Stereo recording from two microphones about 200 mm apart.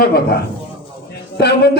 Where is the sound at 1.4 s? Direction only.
55° left (ahead or behind).